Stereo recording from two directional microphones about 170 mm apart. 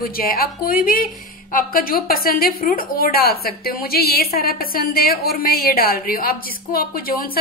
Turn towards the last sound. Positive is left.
turn(degrees=60)  # may be behind; listen again after turning